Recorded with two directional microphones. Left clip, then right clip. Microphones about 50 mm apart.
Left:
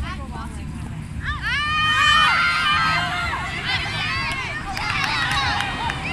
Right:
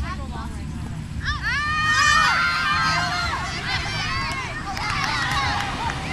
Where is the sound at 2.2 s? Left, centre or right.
Centre.